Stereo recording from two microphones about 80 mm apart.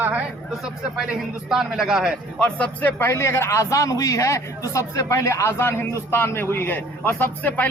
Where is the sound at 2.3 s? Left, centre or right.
Centre.